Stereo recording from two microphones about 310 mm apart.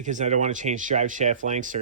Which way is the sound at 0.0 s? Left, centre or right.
Right.